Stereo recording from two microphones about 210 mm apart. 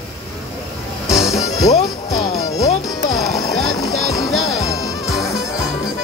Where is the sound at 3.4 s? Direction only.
15° left (ahead or behind).